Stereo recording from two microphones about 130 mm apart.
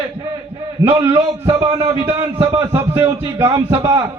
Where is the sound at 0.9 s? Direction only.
20° right (ahead or behind).